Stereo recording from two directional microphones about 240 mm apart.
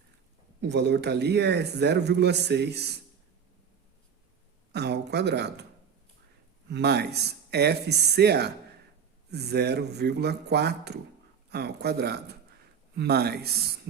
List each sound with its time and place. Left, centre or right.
0.6 s a man's voice: right
4.7 s a man's voice: right
6.7 s a man's voice: right